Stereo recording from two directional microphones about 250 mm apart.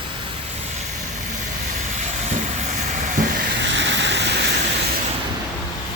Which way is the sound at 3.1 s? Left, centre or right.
Right.